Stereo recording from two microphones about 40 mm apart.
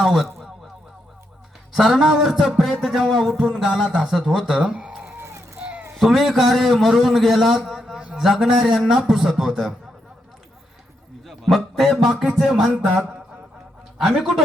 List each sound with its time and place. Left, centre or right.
0.0 s speech: centre
1.7 s a man's voice: centre
2.8 s a man's voice: centre
4.7 s a sound: right
6.0 s a man's voice: centre
11.3 s a man's voice: centre
14.0 s a man's voice: centre